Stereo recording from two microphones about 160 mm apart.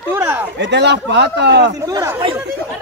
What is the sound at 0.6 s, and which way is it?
A man's voice, 90° right.